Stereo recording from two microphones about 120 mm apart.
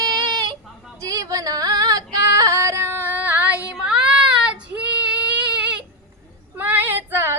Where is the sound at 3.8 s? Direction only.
10° right (ahead or behind).